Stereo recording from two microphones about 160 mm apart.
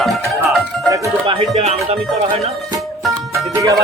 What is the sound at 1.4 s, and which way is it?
Music, 35° right (ahead or behind).